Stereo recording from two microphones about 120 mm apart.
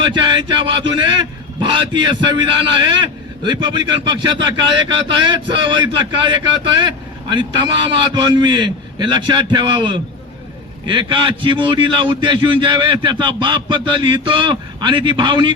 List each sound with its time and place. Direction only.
0.0 s a man's voice: 40° right (ahead or behind)